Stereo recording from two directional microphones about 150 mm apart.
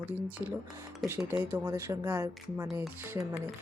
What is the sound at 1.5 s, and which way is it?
Speech, 15° right (ahead or behind).